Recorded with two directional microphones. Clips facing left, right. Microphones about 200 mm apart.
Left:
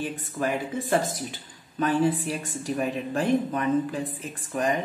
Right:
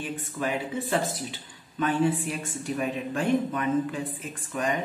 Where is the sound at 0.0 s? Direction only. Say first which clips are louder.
Left 2 dB; 45° left (ahead or behind).